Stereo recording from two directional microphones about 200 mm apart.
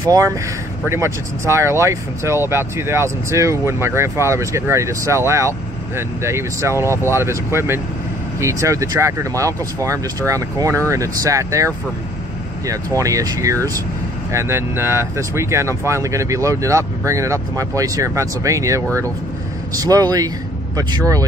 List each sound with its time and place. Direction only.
0.0 s speech: 15° right (ahead or behind)
19.8 s speech: 20° right (ahead or behind)